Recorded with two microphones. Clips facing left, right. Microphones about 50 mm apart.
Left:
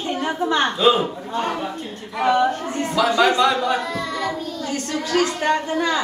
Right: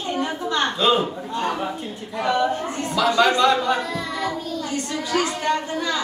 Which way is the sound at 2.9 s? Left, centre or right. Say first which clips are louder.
Left 1 dB; centre.